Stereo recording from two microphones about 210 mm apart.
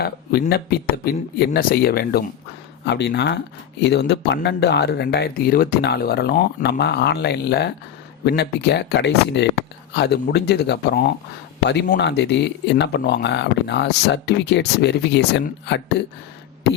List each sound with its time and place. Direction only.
0.0 s speech: 50° left (ahead or behind)